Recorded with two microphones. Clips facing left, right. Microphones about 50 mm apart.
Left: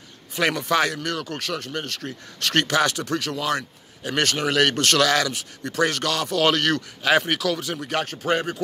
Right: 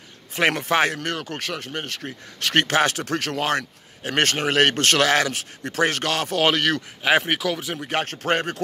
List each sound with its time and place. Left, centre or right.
0.3 s speech: right
6.5 s speech: centre
7.9 s speech: right